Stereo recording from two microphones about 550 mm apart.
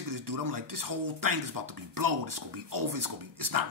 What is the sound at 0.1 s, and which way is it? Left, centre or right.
Speech, right.